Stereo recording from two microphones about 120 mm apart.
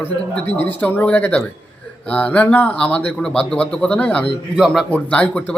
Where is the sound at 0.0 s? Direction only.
15° left (ahead or behind).